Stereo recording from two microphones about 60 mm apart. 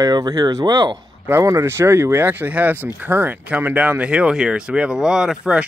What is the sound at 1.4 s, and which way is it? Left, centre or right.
Speech, right.